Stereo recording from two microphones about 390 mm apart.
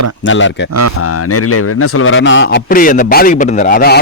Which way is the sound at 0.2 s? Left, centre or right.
Left.